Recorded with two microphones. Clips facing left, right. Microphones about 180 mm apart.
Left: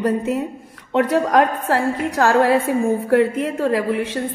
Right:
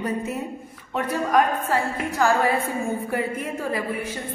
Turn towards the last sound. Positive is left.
turn(degrees=85)